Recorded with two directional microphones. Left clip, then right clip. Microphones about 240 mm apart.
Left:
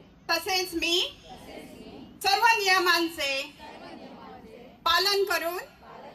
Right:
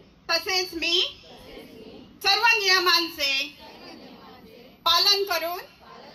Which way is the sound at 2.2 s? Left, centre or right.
Centre.